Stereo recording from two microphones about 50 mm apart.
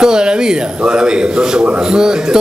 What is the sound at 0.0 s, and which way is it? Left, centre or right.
A man's voice, centre.